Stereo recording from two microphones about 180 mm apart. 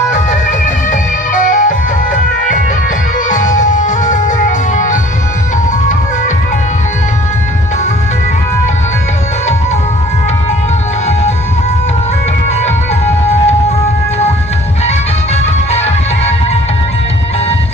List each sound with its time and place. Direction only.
1.3 s music: 45° left (ahead or behind)
3.3 s music: 45° left (ahead or behind)
15.7 s music: 35° left (ahead or behind)